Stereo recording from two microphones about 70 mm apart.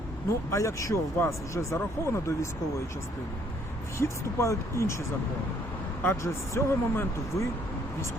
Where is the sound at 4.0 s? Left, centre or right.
Left.